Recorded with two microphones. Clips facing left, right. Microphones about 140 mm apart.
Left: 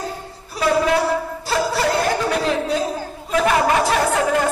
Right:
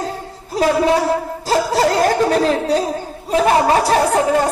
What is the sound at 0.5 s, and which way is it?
Speech, 40° right (ahead or behind).